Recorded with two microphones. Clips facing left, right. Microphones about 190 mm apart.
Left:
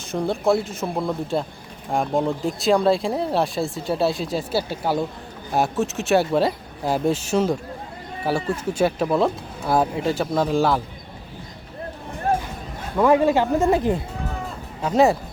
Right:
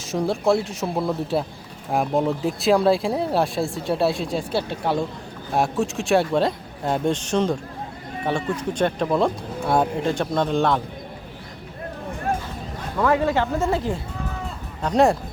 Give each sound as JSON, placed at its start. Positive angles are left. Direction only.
{"t": 0.1, "sound": "speech", "side_deg": 0}
{"t": 13.0, "sound": "speech", "side_deg": 15}
{"t": 14.8, "sound": "speech", "side_deg": 5}